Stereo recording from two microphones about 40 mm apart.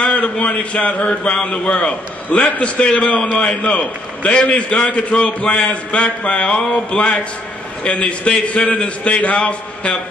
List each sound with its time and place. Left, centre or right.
0.0 s a sound: left
0.5 s a man's voice: left
7.8 s a man's voice: left